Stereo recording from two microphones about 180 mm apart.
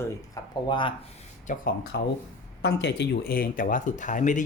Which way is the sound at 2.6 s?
70° left (ahead or behind).